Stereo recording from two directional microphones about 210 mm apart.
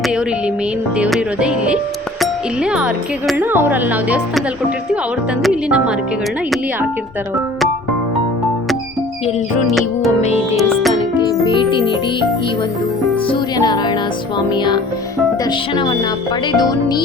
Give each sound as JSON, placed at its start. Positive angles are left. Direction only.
{"t": 0.9, "sound": "speech", "side_deg": -5}
{"t": 9.6, "sound": "speech", "side_deg": 0}
{"t": 10.2, "sound": "music", "side_deg": 30}
{"t": 10.6, "sound": "speech", "side_deg": 0}
{"t": 11.4, "sound": "speech", "side_deg": 25}
{"t": 13.2, "sound": "music", "side_deg": 20}